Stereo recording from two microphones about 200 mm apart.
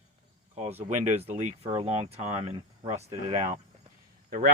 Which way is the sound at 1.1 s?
30° right (ahead or behind).